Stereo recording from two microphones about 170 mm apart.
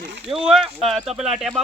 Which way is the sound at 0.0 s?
80° right.